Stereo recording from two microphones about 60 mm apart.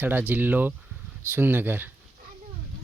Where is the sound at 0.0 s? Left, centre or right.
Right.